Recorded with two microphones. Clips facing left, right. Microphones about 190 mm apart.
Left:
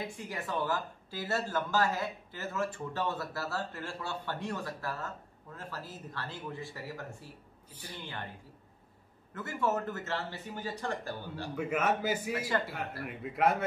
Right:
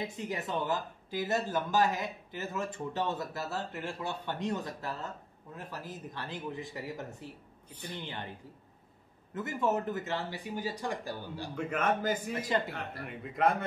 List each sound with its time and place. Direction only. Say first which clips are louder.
0.0 s speech: right 3 dB; 20° right (ahead or behind)
9.3 s speech: right 1 dB; 20° right (ahead or behind)
11.5 s a man's voice: even; 5° left (ahead or behind)
12.4 s speech: right 1 dB; 20° right (ahead or behind)
13.0 s a man's voice: even; 5° left (ahead or behind)